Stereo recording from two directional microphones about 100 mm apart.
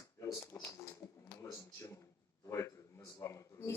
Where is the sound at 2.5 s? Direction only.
30° left (ahead or behind).